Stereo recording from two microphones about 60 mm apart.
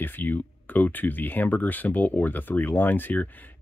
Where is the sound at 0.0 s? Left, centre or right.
Left.